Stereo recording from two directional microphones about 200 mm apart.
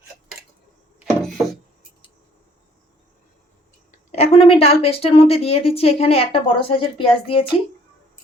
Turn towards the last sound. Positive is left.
turn(degrees=25)  # may be behind; listen again after turning